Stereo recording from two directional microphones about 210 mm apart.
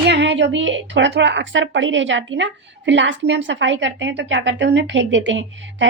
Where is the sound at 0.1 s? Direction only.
55° right (ahead or behind).